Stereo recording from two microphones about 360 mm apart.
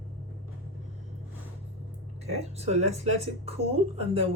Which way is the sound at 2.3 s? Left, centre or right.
Centre.